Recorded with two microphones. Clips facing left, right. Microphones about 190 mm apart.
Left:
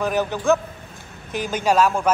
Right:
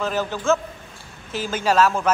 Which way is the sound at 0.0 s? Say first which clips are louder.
Left 2 dB; 15° left (ahead or behind).